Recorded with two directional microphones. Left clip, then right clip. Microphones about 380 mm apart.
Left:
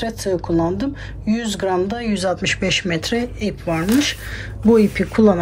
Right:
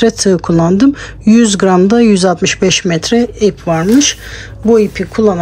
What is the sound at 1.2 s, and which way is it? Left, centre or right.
Speech, centre.